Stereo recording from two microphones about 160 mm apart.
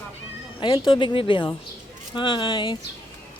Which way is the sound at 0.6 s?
30° left (ahead or behind).